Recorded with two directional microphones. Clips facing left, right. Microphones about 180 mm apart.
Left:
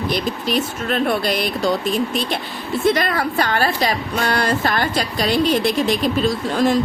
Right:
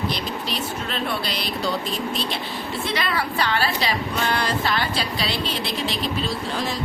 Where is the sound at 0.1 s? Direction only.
50° left (ahead or behind).